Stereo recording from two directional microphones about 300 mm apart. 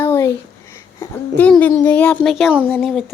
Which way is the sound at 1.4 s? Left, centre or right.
Centre.